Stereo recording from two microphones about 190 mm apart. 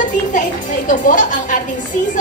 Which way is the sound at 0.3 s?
45° left (ahead or behind).